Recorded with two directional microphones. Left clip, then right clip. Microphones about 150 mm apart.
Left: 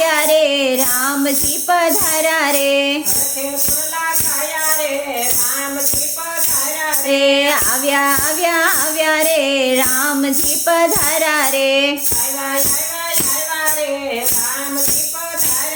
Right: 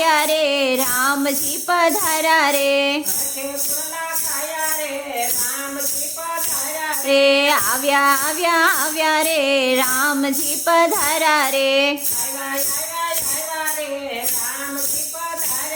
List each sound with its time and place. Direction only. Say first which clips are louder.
0.0 s music: left 3 dB; 20° right (ahead or behind)
7.1 s child singing: even; 20° right (ahead or behind)